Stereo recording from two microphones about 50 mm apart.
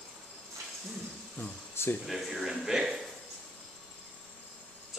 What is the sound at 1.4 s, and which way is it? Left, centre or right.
Speech, left.